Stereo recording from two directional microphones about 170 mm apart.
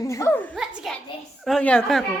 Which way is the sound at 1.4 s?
5° left (ahead or behind).